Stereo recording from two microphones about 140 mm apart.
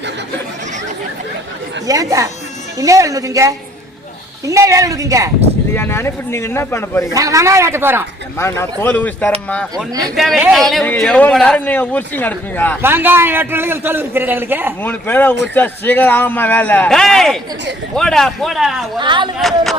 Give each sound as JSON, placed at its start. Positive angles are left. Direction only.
{"t": 1.9, "sound": "speech", "side_deg": -25}
{"t": 5.7, "sound": "a man's voice", "side_deg": 15}
{"t": 7.1, "sound": "speech", "side_deg": -25}
{"t": 8.4, "sound": "a man's voice", "side_deg": 20}
{"t": 9.7, "sound": "speech", "side_deg": -25}
{"t": 10.5, "sound": "a man's voice", "side_deg": 0}
{"t": 12.8, "sound": "a man's voice", "side_deg": -15}
{"t": 14.8, "sound": "a man's voice", "side_deg": 10}
{"t": 18.9, "sound": "speech", "side_deg": -35}
{"t": 19.4, "sound": "a man's voice", "side_deg": 0}